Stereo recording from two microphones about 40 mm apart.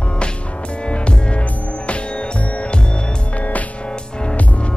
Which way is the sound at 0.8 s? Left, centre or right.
Left.